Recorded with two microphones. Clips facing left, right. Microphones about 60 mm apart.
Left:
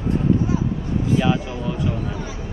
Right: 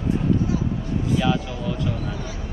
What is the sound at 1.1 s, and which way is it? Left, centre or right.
Speech, left.